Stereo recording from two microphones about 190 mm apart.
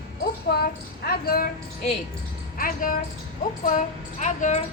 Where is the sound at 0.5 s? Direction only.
60° left (ahead or behind).